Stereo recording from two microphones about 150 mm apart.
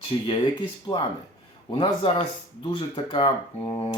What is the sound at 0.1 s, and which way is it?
Speech, 30° left (ahead or behind).